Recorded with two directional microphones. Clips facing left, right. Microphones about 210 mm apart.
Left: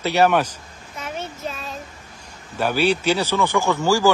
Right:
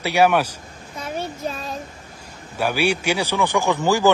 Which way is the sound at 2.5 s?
10° right (ahead or behind).